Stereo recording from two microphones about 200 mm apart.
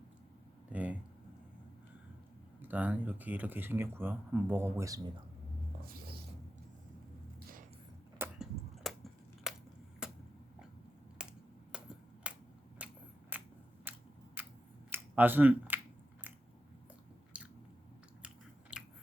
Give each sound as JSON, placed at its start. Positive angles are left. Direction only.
{"t": 0.7, "sound": "a sound", "side_deg": -5}
{"t": 2.6, "sound": "speech", "side_deg": -10}
{"t": 5.8, "sound": "music", "side_deg": -50}
{"t": 8.2, "sound": "tick-tock", "side_deg": 0}
{"t": 9.5, "sound": "a sound", "side_deg": 0}
{"t": 11.2, "sound": "computer keyboard", "side_deg": -5}
{"t": 11.7, "sound": "finger snapping", "side_deg": -5}
{"t": 12.8, "sound": "scissors", "side_deg": -5}
{"t": 14.8, "sound": "a sound", "side_deg": -10}
{"t": 17.3, "sound": "biting", "side_deg": -5}
{"t": 18.7, "sound": "biting", "side_deg": -5}